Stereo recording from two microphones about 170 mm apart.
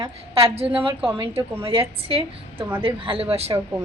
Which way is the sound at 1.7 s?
35° right (ahead or behind).